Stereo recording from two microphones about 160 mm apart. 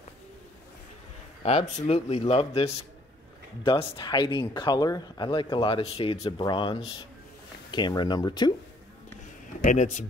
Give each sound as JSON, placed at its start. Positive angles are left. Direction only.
{"t": 1.4, "sound": "speech", "side_deg": 45}
{"t": 9.6, "sound": "speech", "side_deg": 50}